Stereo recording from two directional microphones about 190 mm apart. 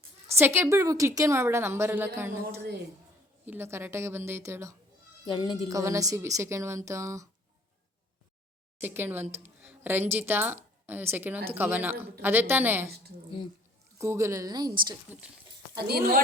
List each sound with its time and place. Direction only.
0.3 s a woman's voice: 10° right (ahead or behind)
3.4 s a woman's voice: 10° right (ahead or behind)
5.2 s a woman's voice: 25° left (ahead or behind)
5.6 s a woman's voice: 15° right (ahead or behind)
8.8 s a woman's voice: 10° right (ahead or behind)
14.0 s a woman's voice: 15° right (ahead or behind)
15.9 s speech: 55° right (ahead or behind)